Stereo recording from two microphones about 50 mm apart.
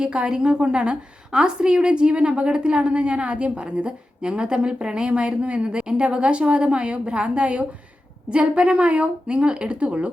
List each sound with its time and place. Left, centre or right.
0.0 s a woman's voice: centre